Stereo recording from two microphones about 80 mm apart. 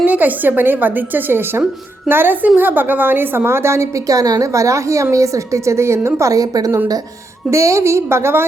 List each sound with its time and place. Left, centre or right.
0.0 s a woman's voice: right
7.5 s a woman's voice: right